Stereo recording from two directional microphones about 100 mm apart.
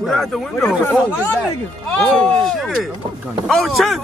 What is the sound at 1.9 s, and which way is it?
Speech, 15° left (ahead or behind).